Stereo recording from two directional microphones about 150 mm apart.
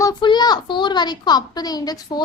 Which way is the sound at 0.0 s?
30° left (ahead or behind).